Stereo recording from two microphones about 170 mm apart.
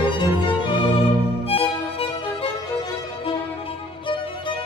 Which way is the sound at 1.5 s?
35° left (ahead or behind).